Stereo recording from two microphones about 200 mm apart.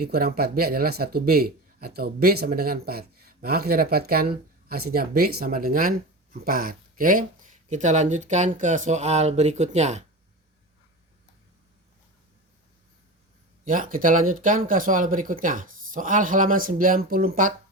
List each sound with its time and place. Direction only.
0.0 s speech: 50° right (ahead or behind); by 10.0 s 35° right (ahead or behind)
13.7 s speech: 45° right (ahead or behind)